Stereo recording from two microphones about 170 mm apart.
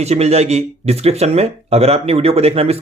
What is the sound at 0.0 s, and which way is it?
Speech, 40° right (ahead or behind).